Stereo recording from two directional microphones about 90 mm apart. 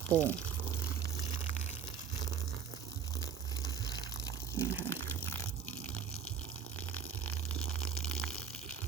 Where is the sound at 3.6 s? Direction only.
45° left (ahead or behind).